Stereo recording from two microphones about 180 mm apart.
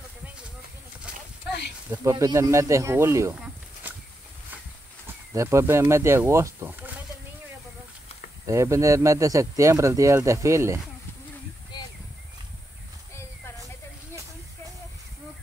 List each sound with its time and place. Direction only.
1.9 s speech: 15° right (ahead or behind)
5.0 s speech: 15° right (ahead or behind)
8.5 s speech: 15° right (ahead or behind)